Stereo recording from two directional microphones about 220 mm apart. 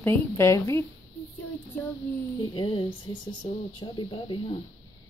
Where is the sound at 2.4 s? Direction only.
20° left (ahead or behind).